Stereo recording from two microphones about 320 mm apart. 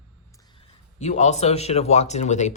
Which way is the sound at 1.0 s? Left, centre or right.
Left.